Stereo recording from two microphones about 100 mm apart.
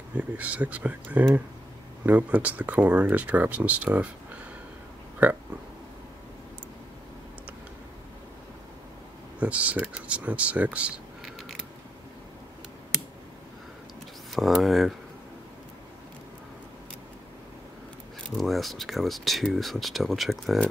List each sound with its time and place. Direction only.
0.2 s speech: 15° right (ahead or behind)
5.2 s speech: 15° right (ahead or behind)
9.4 s speech: 15° right (ahead or behind)
11.2 s creak: centre (ahead or behind)
14.3 s speech: centre (ahead or behind)
18.3 s speech: centre (ahead or behind)